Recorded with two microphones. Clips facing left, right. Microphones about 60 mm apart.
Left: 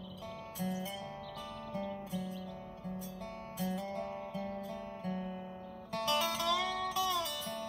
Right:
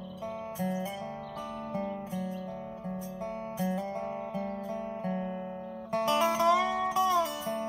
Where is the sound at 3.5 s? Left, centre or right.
Right.